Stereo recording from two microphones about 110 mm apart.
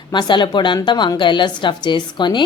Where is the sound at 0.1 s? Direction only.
45° left (ahead or behind).